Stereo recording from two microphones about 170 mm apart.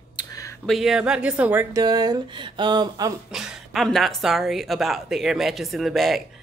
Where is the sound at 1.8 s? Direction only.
25° right (ahead or behind).